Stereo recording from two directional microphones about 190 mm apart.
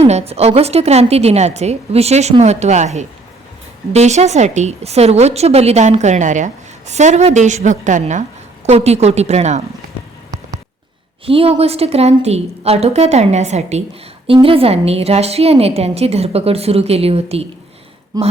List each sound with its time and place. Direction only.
0.0 s a woman's voice: 35° right (ahead or behind)
11.3 s a woman's voice: 30° right (ahead or behind)